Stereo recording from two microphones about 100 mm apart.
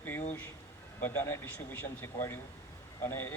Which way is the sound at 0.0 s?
20° left (ahead or behind).